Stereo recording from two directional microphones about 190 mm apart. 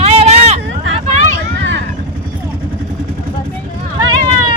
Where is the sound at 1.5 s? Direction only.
70° right (ahead or behind).